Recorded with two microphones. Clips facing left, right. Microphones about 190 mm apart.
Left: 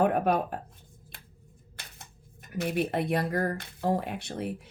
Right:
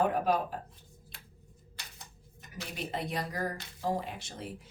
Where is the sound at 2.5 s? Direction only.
55° left (ahead or behind).